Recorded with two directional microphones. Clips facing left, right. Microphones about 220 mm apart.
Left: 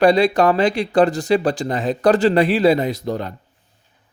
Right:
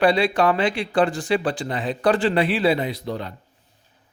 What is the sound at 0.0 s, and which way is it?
Speech, 40° left (ahead or behind).